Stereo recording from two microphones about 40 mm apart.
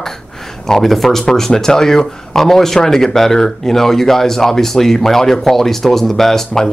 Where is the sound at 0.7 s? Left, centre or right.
Centre.